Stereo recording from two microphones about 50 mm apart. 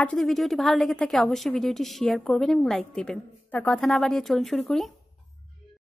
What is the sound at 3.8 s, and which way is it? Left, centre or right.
A woman's voice, centre.